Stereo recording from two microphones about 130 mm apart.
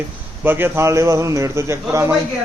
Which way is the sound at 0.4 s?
15° right (ahead or behind).